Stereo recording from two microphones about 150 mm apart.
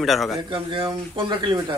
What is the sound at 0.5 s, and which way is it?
Speech, 35° right (ahead or behind).